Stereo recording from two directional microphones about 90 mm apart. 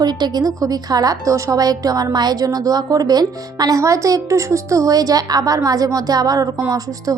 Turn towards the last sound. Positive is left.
turn(degrees=-40)  # may be behind; listen again after turning